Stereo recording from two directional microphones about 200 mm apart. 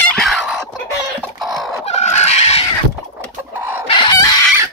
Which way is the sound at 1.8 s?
35° left (ahead or behind).